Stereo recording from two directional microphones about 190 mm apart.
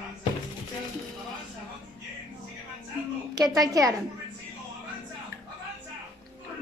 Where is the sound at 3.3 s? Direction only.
20° right (ahead or behind).